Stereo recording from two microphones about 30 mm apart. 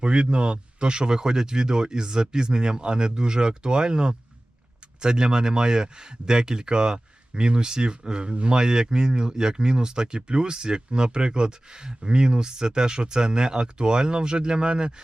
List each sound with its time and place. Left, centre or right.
0.0 s speech: right